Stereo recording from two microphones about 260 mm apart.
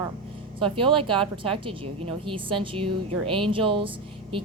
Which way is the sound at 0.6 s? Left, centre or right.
Centre.